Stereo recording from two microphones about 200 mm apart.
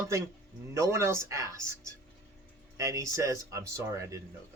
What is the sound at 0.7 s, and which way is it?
Speech, 15° right (ahead or behind).